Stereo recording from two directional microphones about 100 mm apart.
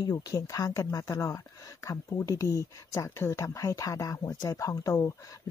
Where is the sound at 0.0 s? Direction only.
35° left (ahead or behind).